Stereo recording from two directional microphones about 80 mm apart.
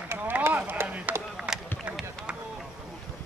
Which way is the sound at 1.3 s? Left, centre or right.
Centre.